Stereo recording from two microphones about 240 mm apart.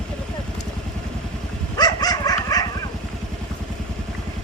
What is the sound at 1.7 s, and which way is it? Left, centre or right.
Dog, centre.